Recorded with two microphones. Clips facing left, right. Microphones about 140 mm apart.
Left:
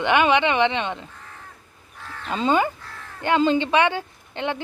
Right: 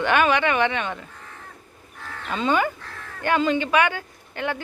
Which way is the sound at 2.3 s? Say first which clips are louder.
Left 2 dB; 25° left (ahead or behind).